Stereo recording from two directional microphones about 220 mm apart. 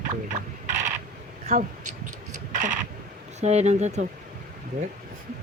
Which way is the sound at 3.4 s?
30° right (ahead or behind).